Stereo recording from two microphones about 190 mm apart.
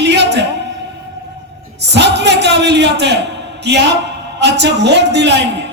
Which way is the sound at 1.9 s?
65° right (ahead or behind).